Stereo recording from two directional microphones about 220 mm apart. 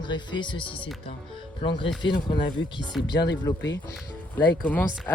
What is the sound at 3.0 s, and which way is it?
Speech, 20° left (ahead or behind).